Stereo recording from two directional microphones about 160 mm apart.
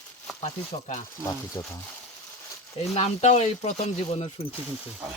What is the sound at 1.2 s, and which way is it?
Speech, 20° left (ahead or behind).